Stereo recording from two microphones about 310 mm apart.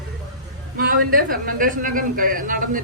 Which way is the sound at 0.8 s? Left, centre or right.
Right.